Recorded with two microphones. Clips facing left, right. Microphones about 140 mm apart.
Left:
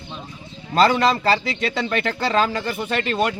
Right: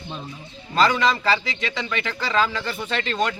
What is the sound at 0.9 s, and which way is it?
Speech, 35° left (ahead or behind).